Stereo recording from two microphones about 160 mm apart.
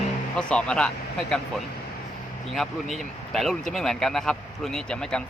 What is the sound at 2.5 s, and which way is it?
Speech, centre (ahead or behind).